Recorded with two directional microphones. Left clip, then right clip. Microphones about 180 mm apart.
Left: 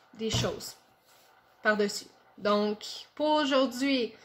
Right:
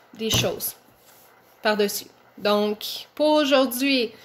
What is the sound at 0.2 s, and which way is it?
Speech, 10° right (ahead or behind).